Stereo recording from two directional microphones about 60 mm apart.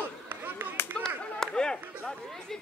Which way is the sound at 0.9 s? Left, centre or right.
Centre.